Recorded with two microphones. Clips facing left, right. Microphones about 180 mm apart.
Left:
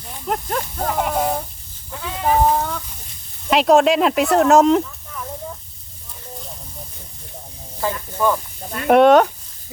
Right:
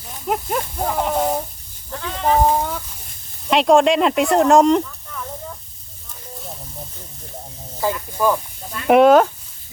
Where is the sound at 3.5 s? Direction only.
Centre (ahead or behind).